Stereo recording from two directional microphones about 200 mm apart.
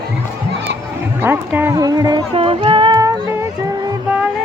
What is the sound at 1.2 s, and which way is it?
Speech, 10° right (ahead or behind).